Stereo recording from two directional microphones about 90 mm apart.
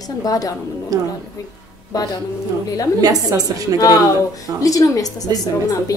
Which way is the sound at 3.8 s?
45° left (ahead or behind).